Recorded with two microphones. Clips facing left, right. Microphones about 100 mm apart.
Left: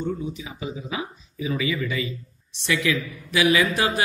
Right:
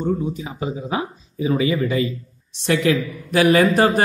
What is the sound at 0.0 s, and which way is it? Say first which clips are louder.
A man's voice: right 6 dB; 40° right (ahead or behind).